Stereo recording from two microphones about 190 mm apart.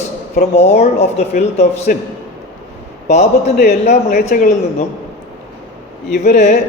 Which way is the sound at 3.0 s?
35° left (ahead or behind).